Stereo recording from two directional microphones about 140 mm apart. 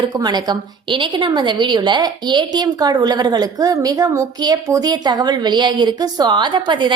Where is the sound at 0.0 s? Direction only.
30° right (ahead or behind).